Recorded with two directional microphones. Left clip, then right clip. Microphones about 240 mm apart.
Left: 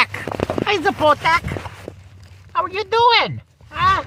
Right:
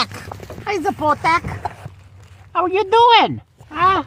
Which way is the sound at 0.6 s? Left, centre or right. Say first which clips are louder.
Left 2 dB; left.